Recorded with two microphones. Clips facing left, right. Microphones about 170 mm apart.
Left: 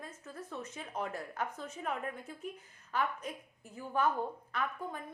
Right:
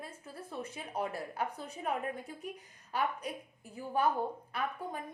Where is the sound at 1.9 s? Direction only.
15° right (ahead or behind).